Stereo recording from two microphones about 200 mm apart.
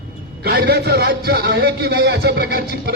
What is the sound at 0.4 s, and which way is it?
A man's voice, 50° right (ahead or behind).